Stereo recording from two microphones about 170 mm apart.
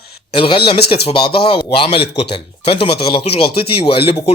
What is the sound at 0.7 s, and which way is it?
Speech, 70° left (ahead or behind).